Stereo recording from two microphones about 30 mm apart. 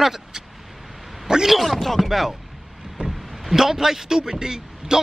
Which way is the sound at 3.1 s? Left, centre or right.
Centre.